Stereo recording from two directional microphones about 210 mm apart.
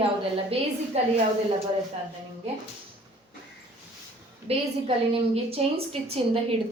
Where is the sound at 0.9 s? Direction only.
30° right (ahead or behind).